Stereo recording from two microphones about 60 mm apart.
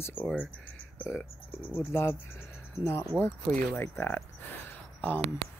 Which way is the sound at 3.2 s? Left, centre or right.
Left.